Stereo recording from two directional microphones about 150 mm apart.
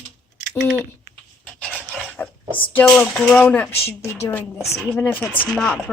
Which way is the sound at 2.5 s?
10° left (ahead or behind).